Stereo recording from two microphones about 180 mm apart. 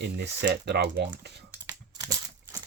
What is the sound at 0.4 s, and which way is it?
Speech, 65° right (ahead or behind).